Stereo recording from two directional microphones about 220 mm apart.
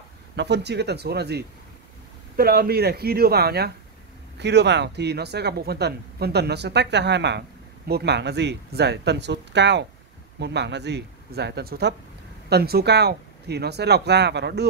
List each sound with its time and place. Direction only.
0.4 s speech: 50° right (ahead or behind)